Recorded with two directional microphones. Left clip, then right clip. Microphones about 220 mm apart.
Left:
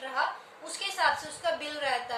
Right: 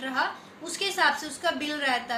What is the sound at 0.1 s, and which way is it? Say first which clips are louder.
A woman's voice: right 1 dB; centre (ahead or behind).